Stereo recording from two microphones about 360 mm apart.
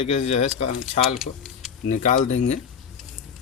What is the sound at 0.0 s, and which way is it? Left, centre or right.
Speech, centre.